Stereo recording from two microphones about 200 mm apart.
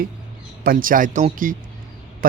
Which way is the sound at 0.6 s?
45° right (ahead or behind).